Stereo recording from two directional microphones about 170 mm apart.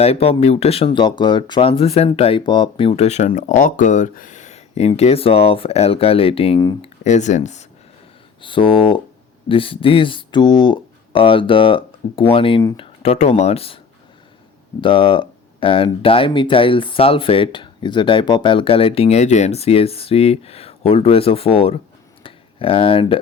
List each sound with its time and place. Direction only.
0.0 s speech: 35° left (ahead or behind)
8.4 s speech: 30° left (ahead or behind)
14.8 s speech: 30° left (ahead or behind)
22.2 s a sound: 30° left (ahead or behind)